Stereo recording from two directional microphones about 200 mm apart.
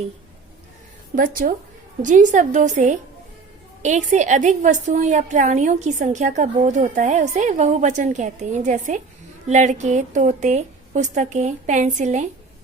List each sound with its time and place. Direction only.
1.1 s a woman's voice: 45° right (ahead or behind)